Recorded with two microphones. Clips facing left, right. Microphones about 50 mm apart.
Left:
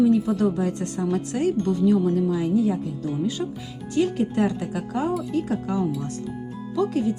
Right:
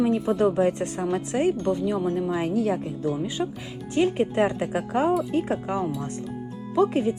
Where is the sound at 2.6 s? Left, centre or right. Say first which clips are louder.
Left 2 dB; right.